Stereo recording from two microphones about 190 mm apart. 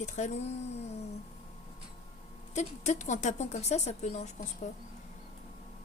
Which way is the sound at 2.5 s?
40° left (ahead or behind).